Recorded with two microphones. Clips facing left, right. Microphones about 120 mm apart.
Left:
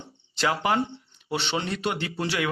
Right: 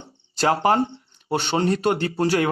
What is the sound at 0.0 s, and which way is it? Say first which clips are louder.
Speech: right 5 dB; 40° right (ahead or behind).